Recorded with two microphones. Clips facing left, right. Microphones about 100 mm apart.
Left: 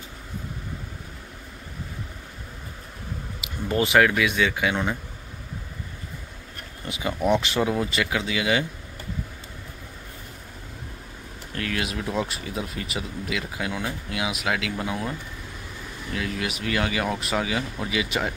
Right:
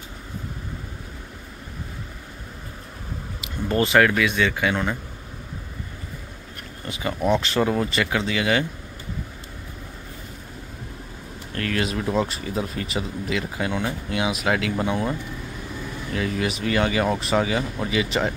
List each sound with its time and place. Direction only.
3.6 s speech: 10° left (ahead or behind)
6.9 s speech: 15° left (ahead or behind)
11.5 s speech: 5° left (ahead or behind)
16.1 s speech: centre (ahead or behind)